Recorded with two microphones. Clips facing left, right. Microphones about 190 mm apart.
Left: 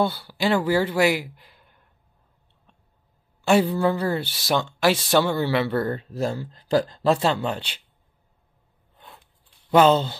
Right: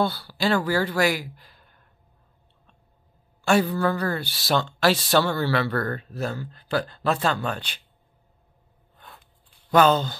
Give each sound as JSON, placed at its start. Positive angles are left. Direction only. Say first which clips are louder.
{"t": 0.0, "sound": "speech", "louder": "left 1 dB", "side_deg": 20}
{"t": 3.4, "sound": "speech", "louder": "left 2 dB", "side_deg": 20}
{"t": 8.9, "sound": "a sound", "louder": "left 1 dB", "side_deg": 20}
{"t": 9.7, "sound": "speech", "louder": "left 2 dB", "side_deg": 25}